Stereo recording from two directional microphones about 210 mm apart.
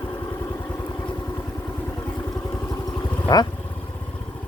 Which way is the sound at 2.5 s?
10° left (ahead or behind).